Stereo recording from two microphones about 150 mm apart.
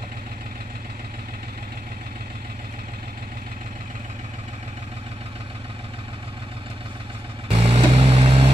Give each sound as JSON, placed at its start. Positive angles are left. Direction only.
{"t": 7.4, "sound": "vehicle", "side_deg": -40}